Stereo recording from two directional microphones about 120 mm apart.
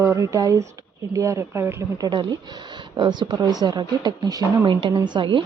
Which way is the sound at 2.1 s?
40° right (ahead or behind).